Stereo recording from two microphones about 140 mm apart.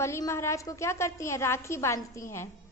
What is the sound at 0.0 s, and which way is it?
A woman's voice, 20° left (ahead or behind).